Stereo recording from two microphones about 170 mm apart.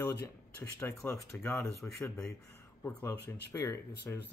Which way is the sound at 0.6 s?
10° left (ahead or behind).